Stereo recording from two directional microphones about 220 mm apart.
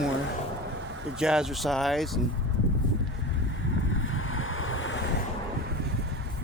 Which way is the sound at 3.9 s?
65° left (ahead or behind).